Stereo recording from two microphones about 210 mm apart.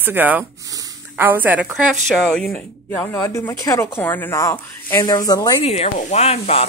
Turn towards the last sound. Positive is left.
turn(degrees=30)  # may be behind; listen again after turning